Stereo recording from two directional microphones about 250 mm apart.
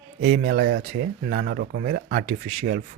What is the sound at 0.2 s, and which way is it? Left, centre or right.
Speech, right.